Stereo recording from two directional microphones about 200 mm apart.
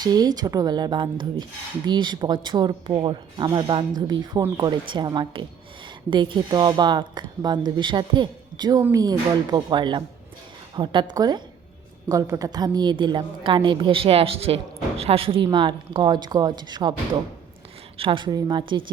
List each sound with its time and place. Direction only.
0.0 s speech: 20° right (ahead or behind)
17.9 s speech: 25° right (ahead or behind)